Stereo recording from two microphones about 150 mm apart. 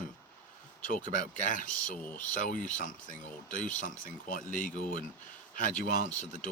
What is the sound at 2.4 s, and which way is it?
Speech, 60° left (ahead or behind).